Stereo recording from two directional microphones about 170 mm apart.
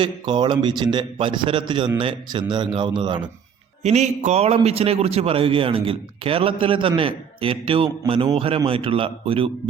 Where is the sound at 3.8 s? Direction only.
40° right (ahead or behind).